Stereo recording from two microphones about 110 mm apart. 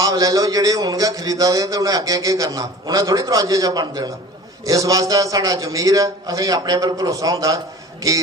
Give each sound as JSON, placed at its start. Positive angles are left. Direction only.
{"t": 0.0, "sound": "a man's voice", "side_deg": -35}